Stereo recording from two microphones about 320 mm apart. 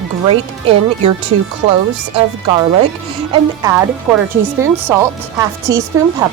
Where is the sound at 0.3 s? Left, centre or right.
Centre.